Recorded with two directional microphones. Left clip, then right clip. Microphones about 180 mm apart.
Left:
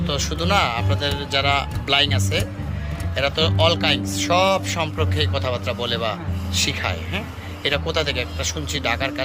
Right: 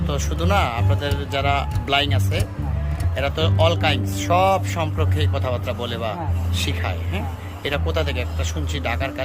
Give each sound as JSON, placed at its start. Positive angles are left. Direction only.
{"t": 0.1, "sound": "speech", "side_deg": -15}